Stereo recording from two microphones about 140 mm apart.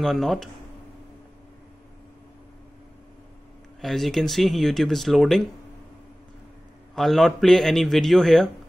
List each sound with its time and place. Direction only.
0.0 s speech: centre (ahead or behind)
3.8 s speech: centre (ahead or behind)
7.0 s speech: centre (ahead or behind)